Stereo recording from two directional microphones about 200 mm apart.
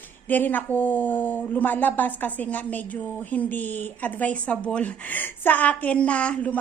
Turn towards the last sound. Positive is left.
turn(degrees=5)  # may be behind; listen again after turning